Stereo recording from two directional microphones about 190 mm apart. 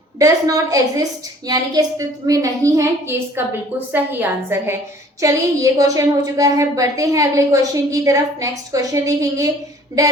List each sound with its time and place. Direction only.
0.2 s a woman's voice: 15° right (ahead or behind)